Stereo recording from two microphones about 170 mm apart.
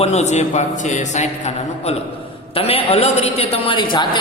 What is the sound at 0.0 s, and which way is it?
A man's voice, 40° left (ahead or behind).